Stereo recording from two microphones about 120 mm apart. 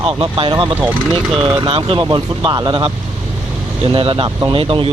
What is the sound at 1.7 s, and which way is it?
Speech, 50° right (ahead or behind).